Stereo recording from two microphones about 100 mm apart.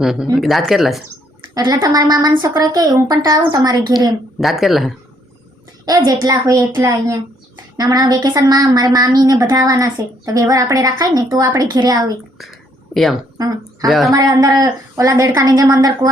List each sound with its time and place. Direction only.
0.0 s speech: 5° right (ahead or behind)
1.5 s a woman's voice: 40° right (ahead or behind)
4.4 s speech: centre (ahead or behind)
5.8 s a woman's voice: 45° right (ahead or behind)
7.8 s a woman's voice: 40° right (ahead or behind)
12.4 s a sound: centre (ahead or behind)
13.8 s speech: centre (ahead or behind)
14.1 s a woman's voice: 35° right (ahead or behind)